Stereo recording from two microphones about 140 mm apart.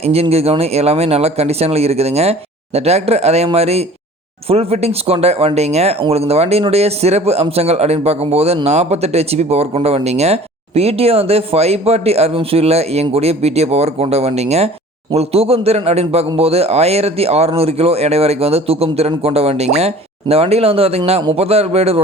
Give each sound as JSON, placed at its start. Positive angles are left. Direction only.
{"t": 0.0, "sound": "a man's voice", "side_deg": -45}